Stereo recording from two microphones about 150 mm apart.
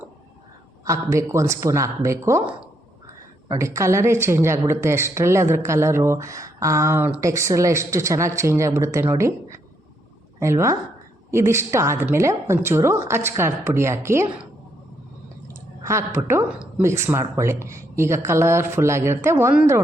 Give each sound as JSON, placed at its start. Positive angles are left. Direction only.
{"t": 0.9, "sound": "speech", "side_deg": -20}
{"t": 3.5, "sound": "a woman's voice", "side_deg": -20}
{"t": 15.8, "sound": "a woman's voice", "side_deg": -20}